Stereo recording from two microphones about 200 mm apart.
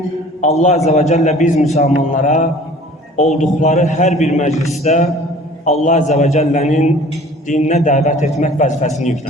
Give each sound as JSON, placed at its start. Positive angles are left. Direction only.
{"t": 0.4, "sound": "a man's voice", "side_deg": 35}